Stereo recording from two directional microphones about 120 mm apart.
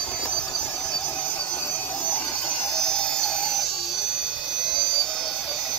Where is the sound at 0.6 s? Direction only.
5° left (ahead or behind).